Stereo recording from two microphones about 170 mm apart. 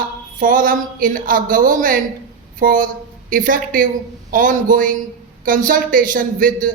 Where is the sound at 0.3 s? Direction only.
55° right (ahead or behind).